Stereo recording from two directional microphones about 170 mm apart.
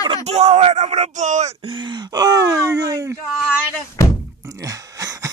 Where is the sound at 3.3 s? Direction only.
5° left (ahead or behind).